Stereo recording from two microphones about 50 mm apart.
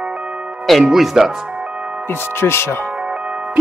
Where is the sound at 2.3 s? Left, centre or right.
Left.